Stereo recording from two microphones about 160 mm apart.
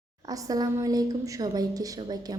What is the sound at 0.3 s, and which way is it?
A woman's voice, 20° right (ahead or behind).